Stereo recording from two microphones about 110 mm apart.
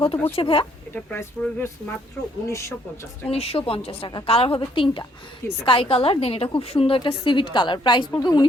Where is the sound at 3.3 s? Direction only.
65° left (ahead or behind).